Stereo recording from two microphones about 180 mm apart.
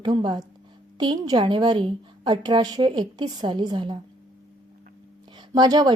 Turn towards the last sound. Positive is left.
turn(degrees=-20)  # may be behind; listen again after turning